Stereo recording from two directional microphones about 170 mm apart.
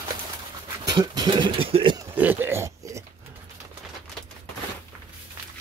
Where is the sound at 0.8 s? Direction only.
25° right (ahead or behind).